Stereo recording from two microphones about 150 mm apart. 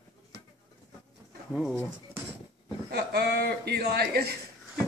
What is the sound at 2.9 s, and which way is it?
Speech, 90° right.